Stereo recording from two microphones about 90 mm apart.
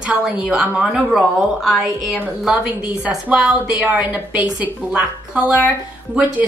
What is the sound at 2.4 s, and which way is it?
A woman's voice, 15° right (ahead or behind).